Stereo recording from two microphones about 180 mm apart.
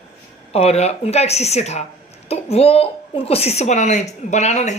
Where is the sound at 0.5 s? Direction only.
35° left (ahead or behind).